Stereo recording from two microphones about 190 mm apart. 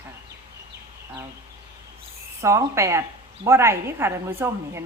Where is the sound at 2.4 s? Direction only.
15° right (ahead or behind).